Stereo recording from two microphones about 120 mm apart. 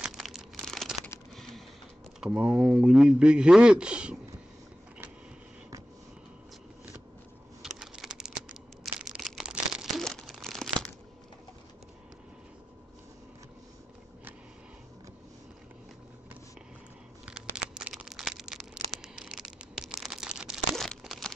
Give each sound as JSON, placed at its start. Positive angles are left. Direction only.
{"t": 0.0, "sound": "crumpling", "side_deg": 0}
{"t": 2.1, "sound": "speech", "side_deg": -5}
{"t": 7.6, "sound": "crumpling", "side_deg": -5}
{"t": 17.3, "sound": "a sound", "side_deg": -5}
{"t": 20.7, "sound": "crumpling", "side_deg": 0}